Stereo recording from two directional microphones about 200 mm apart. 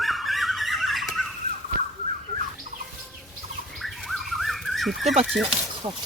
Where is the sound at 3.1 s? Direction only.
Centre (ahead or behind).